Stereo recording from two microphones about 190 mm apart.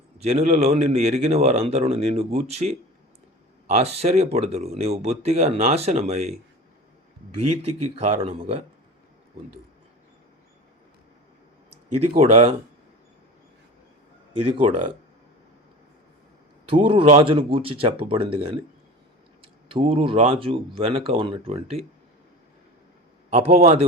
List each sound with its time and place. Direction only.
0.2 s speech: 35° right (ahead or behind)
3.8 s speech: 35° right (ahead or behind)
7.5 s speech: 35° right (ahead or behind)
12.2 s speech: 35° right (ahead or behind)
14.4 s speech: 30° right (ahead or behind)
16.6 s speech: 30° right (ahead or behind)
23.3 s speech: 30° right (ahead or behind)